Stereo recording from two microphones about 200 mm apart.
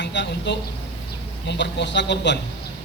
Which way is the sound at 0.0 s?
65° left (ahead or behind).